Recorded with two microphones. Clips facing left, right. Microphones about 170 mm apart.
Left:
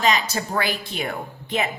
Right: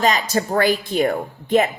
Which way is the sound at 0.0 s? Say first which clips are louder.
Right 3 dB; 45° right (ahead or behind).